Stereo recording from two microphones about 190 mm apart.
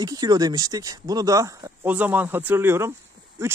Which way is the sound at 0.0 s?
20° right (ahead or behind).